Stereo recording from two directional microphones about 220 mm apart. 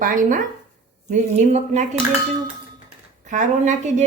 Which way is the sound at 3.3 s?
35° right (ahead or behind).